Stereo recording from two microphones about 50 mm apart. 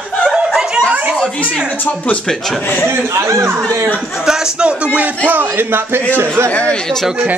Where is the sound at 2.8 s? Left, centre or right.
Right.